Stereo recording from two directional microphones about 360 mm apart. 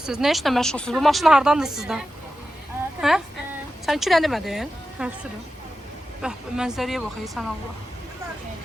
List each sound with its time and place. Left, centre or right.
0.0 s speech: centre
3.0 s a sound: centre
3.8 s speech: centre
6.2 s speech: centre